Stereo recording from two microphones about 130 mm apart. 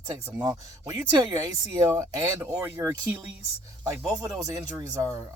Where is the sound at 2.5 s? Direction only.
5° right (ahead or behind).